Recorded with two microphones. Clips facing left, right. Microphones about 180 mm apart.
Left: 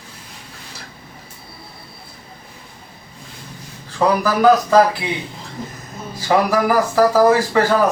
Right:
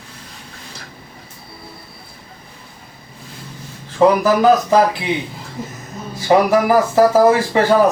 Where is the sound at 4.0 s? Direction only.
20° right (ahead or behind).